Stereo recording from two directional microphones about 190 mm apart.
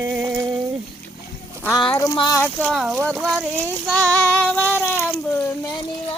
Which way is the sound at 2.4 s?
5° left (ahead or behind).